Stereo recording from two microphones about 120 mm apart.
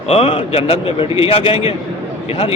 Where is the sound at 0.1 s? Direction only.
50° left (ahead or behind).